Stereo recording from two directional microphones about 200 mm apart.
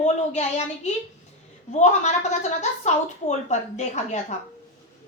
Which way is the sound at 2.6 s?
35° left (ahead or behind).